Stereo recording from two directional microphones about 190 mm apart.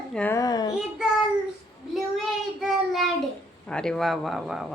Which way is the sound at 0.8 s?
5° right (ahead or behind).